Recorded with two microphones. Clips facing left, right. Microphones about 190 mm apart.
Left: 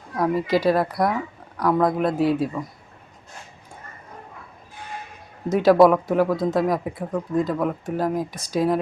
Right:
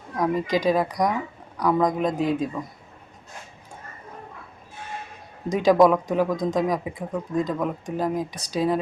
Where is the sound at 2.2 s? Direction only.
5° left (ahead or behind).